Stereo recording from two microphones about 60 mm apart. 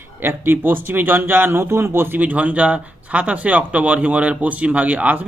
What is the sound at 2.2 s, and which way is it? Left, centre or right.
Speech, right.